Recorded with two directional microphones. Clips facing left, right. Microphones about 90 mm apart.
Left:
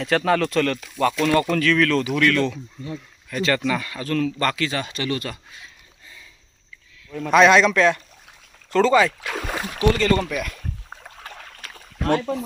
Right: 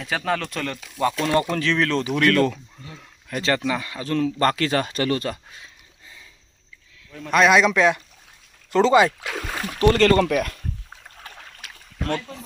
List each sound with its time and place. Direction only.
0.3 s speech: centre (ahead or behind)
1.2 s speech: 25° right (ahead or behind)
3.7 s speech: 20° right (ahead or behind)
7.3 s speech: centre (ahead or behind); by 9.0 s 20° right (ahead or behind)
9.3 s speech: 10° left (ahead or behind)
10.1 s speech: 55° right (ahead or behind)
11.6 s a sound: 45° left (ahead or behind)
12.2 s speech: 65° left (ahead or behind)